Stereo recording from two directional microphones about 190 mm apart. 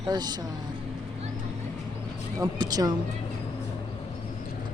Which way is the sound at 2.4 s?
20° right (ahead or behind).